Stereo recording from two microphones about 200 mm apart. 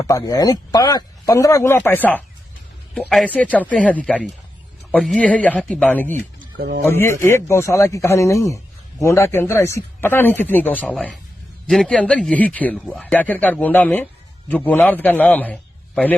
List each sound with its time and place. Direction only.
0.0 s speech: 15° left (ahead or behind)
6.6 s speech: 55° right (ahead or behind)
6.8 s speech: 15° left (ahead or behind)